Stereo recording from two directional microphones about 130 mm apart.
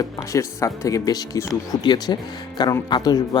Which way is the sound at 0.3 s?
25° left (ahead or behind).